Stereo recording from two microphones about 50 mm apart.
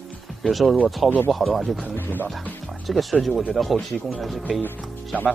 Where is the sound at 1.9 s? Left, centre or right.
Left.